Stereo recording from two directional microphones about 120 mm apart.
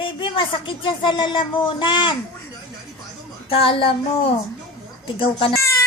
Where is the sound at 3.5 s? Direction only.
50° left (ahead or behind).